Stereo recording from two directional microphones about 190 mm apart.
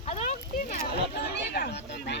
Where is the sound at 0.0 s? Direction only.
35° left (ahead or behind).